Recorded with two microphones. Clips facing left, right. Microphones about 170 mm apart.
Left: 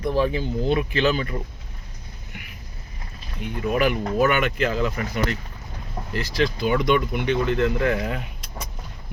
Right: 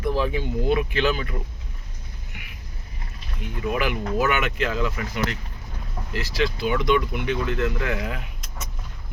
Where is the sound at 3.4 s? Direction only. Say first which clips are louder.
Left 4 dB; centre (ahead or behind).